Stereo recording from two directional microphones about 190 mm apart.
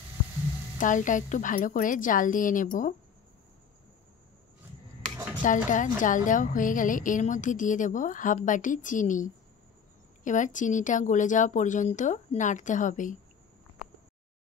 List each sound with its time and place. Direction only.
0.7 s a woman's voice: 45° left (ahead or behind)
5.4 s a woman's voice: 40° left (ahead or behind)